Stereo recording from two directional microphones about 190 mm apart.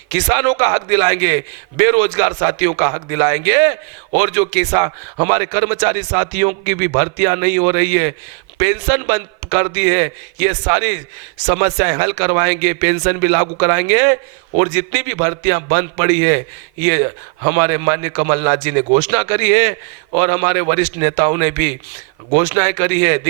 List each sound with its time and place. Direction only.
0.1 s a man's voice: 15° right (ahead or behind)